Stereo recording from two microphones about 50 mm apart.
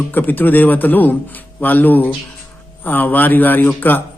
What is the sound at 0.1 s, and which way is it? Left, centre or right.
Speech, left.